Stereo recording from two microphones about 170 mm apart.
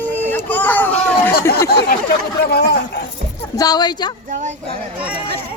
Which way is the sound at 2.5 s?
75° left (ahead or behind).